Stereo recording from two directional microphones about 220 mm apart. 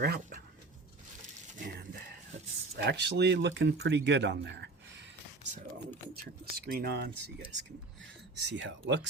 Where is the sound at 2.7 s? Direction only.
50° right (ahead or behind).